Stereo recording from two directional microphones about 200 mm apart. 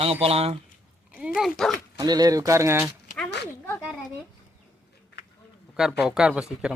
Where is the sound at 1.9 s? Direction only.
20° right (ahead or behind).